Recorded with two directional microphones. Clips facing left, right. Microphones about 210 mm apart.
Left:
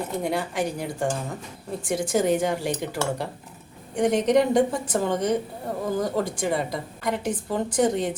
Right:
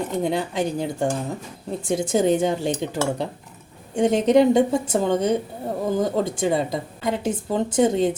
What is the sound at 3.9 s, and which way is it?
A woman's voice, 25° right (ahead or behind).